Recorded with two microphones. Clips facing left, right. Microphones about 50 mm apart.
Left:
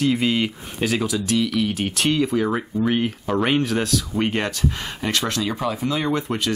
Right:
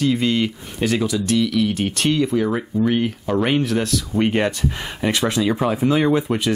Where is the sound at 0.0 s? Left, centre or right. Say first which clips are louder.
Right 1 dB; centre.